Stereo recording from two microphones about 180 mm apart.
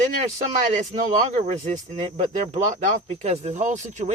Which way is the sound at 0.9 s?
40° right (ahead or behind).